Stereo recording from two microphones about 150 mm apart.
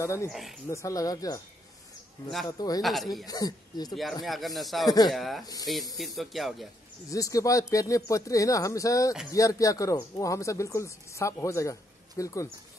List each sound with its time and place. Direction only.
0.0 s speech: 20° left (ahead or behind)
0.3 s speech: centre (ahead or behind)
0.7 s speech: 20° left (ahead or behind)
2.4 s speech: 25° left (ahead or behind)
2.8 s speech: centre (ahead or behind)
3.3 s speech: 25° left (ahead or behind)
3.9 s speech: centre (ahead or behind)
4.8 s speech: 25° left (ahead or behind)
5.1 s speech: centre (ahead or behind)
5.4 s speech: 25° left (ahead or behind)
5.9 s speech: centre (ahead or behind)
7.1 s speech: 20° left (ahead or behind)